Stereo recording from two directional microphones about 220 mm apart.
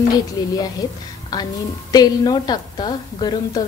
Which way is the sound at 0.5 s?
15° left (ahead or behind).